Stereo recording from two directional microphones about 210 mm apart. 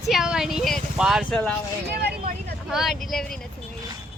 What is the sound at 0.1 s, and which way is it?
Speech, centre (ahead or behind).